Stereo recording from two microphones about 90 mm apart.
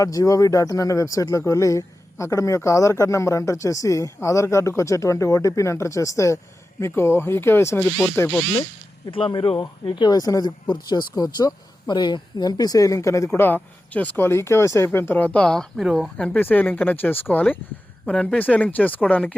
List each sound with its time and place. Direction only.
0.0 s speech: 40° left (ahead or behind); by 8.4 s 20° left (ahead or behind)
9.0 s speech: 70° left (ahead or behind)
9.8 s speech: 55° left (ahead or behind); by 14.8 s 35° left (ahead or behind)
14.9 s speech: 20° left (ahead or behind); by 16.0 s centre (ahead or behind)
16.1 s speech: 15° left (ahead or behind)
18.0 s speech: 5° left (ahead or behind)
18.3 s speech: 20° left (ahead or behind)